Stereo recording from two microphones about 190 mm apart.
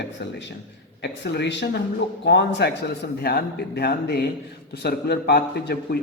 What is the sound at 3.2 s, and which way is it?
Speech, 55° left (ahead or behind).